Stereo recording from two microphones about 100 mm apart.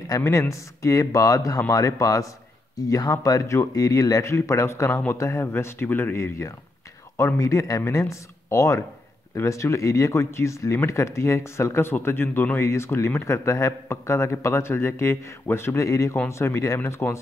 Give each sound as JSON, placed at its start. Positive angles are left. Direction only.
{"t": 0.2, "sound": "speech", "side_deg": 30}